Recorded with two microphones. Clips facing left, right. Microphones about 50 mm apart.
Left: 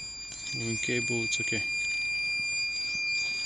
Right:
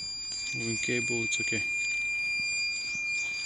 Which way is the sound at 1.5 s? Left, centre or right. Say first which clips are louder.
Even; centre.